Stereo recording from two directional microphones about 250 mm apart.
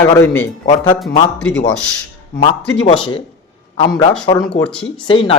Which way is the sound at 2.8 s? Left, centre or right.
Centre.